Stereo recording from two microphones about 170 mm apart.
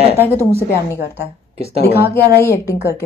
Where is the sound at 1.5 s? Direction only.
35° right (ahead or behind).